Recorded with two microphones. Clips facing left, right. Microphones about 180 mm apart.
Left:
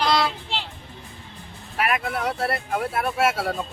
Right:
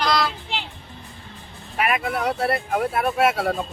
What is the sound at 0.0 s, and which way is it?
Child singing, 30° left (ahead or behind).